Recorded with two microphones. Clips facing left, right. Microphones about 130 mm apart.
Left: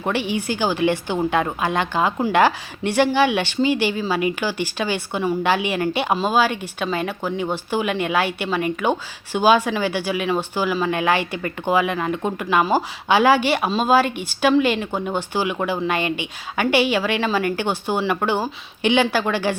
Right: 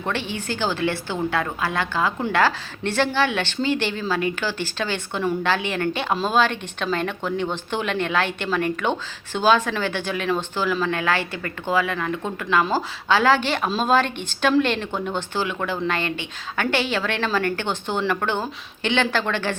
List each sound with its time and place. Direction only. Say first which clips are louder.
0.0 s speech: left 4 dB; 15° left (ahead or behind)